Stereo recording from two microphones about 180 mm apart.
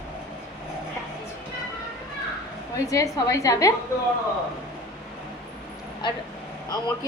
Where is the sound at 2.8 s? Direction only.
15° left (ahead or behind).